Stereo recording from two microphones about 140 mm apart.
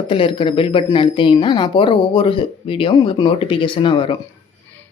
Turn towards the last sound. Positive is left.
turn(degrees=35)  # may be behind; listen again after turning